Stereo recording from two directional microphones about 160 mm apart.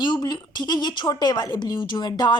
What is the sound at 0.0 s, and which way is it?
A woman's voice, 30° left (ahead or behind).